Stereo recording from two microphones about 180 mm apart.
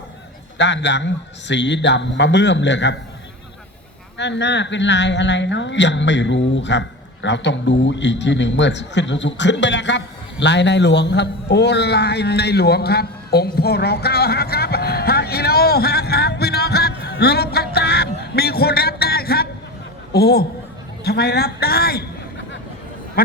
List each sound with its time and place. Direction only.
0.6 s a woman's voice: 75° left (ahead or behind)
4.2 s a woman's voice: 75° left (ahead or behind)
10.4 s a sound: 75° left (ahead or behind); by 19.5 s 60° left (ahead or behind)
20.1 s a man's voice: 60° left (ahead or behind)
23.2 s a man's voice: 55° left (ahead or behind)